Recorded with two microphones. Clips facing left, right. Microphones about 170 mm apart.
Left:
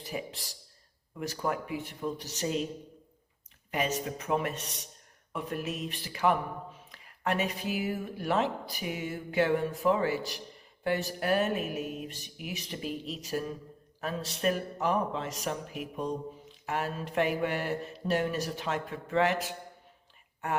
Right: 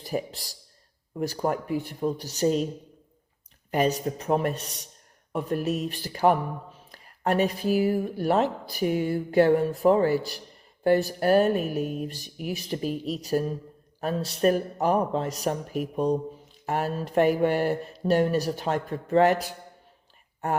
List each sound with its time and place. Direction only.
0.0 s speech: 35° right (ahead or behind)
3.7 s speech: 35° right (ahead or behind)